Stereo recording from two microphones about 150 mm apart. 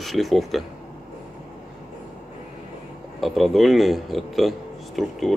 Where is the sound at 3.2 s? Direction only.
Centre (ahead or behind).